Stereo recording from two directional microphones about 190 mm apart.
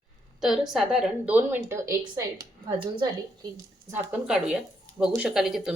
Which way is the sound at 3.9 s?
5° right (ahead or behind).